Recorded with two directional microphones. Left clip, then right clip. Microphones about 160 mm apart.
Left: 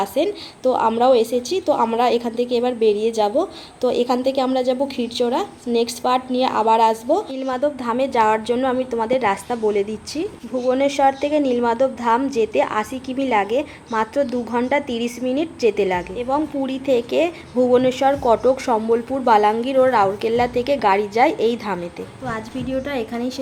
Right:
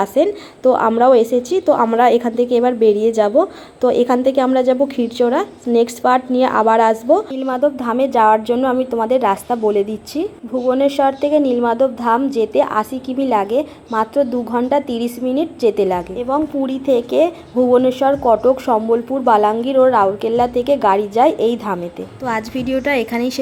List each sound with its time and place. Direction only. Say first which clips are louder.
0.2 s a woman's voice: right 5 dB; 20° right (ahead or behind)
1.2 s a woman's voice: right 4 dB; 55° right (ahead or behind)
1.7 s a woman's voice: right 5 dB; 15° right (ahead or behind)
22.3 s a woman's voice: right 7 dB; 30° right (ahead or behind)